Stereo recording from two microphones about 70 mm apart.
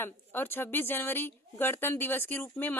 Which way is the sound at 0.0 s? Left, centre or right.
Left.